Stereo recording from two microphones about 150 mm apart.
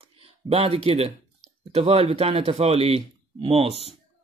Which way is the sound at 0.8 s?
45° right (ahead or behind).